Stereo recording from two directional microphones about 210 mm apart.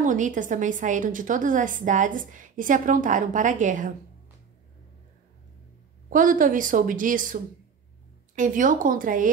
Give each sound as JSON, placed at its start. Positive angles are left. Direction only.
{"t": 0.0, "sound": "a woman's voice", "side_deg": -40}
{"t": 6.0, "sound": "a woman's voice", "side_deg": -40}
{"t": 8.4, "sound": "a woman's voice", "side_deg": -40}